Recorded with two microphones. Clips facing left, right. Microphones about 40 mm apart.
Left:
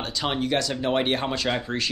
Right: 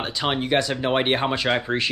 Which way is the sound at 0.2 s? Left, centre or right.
Right.